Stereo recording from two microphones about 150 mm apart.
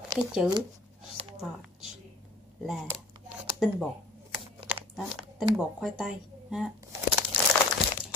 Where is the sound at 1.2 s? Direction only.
40° right (ahead or behind).